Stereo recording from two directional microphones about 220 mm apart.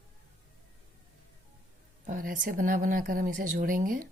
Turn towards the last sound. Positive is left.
turn(degrees=-40)  # may be behind; listen again after turning